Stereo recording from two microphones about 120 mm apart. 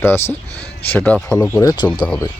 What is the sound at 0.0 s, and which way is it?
Speech, 20° left (ahead or behind).